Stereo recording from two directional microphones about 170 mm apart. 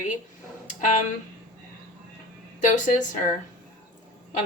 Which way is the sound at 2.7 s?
50° left (ahead or behind).